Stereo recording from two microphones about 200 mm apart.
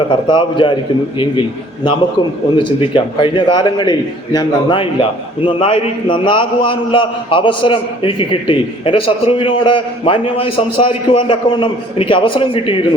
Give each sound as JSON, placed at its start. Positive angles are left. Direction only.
{"t": 0.3, "sound": "a man's voice", "side_deg": 25}